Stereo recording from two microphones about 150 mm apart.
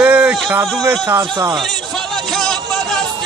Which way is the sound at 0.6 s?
20° right (ahead or behind).